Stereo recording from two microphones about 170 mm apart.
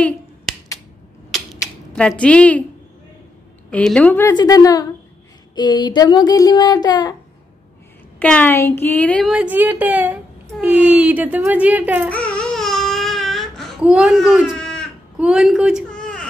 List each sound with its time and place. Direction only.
1.3 s typewriter: 5° left (ahead or behind)
3.7 s a woman's voice: 5° left (ahead or behind)
4.3 s speech: 20° left (ahead or behind)
8.2 s a woman's voice: 10° left (ahead or behind)
9.3 s speech: 10° right (ahead or behind)
12.1 s baby cry: 5° left (ahead or behind)
15.1 s a sound: 5° right (ahead or behind)